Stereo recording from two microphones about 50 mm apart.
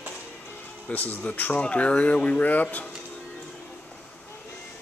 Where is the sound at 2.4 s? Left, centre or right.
Left.